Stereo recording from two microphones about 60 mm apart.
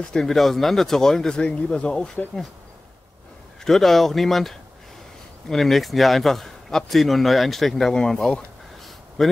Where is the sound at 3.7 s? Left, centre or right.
Centre.